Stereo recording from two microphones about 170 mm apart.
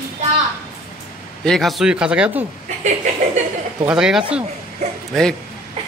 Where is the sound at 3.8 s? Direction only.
5° right (ahead or behind).